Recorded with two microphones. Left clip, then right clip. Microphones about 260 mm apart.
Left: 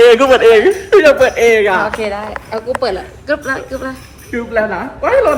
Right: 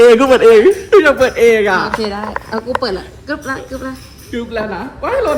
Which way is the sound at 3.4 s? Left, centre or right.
Centre.